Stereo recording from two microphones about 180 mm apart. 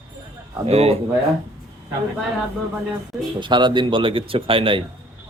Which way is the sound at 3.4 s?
25° right (ahead or behind).